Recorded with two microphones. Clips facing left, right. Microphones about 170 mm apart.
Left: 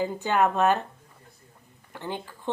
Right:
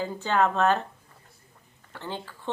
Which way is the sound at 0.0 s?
15° left (ahead or behind).